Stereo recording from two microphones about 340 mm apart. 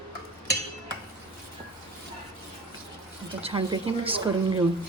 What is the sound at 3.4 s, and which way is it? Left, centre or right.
Speech, centre.